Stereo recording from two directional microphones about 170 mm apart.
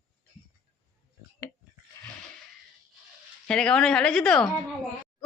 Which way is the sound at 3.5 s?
5° left (ahead or behind).